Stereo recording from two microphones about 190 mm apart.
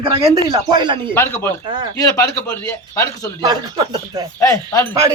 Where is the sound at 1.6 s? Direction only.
25° right (ahead or behind).